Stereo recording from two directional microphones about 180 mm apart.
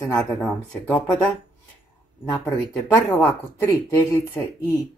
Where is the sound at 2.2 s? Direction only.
20° left (ahead or behind).